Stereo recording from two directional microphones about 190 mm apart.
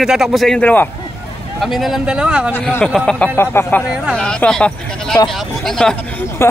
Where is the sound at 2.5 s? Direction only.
5° left (ahead or behind).